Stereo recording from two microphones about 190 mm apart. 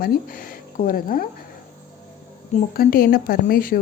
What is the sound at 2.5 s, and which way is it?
A woman's voice, 50° left (ahead or behind).